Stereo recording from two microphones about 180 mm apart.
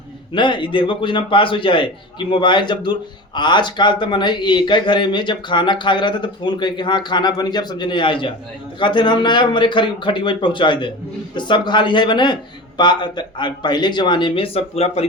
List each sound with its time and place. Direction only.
0.3 s a man's voice: 25° left (ahead or behind)